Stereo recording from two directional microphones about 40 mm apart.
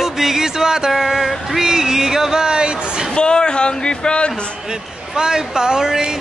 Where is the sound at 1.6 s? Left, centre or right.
Centre.